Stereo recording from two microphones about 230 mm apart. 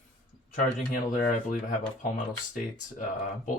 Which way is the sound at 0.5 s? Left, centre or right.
Left.